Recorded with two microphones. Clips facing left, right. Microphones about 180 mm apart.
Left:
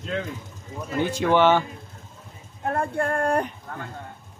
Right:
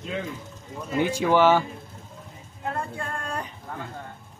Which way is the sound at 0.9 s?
10° right (ahead or behind).